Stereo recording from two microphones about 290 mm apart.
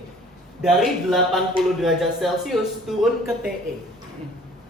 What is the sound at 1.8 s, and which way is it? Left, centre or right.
Speech, centre.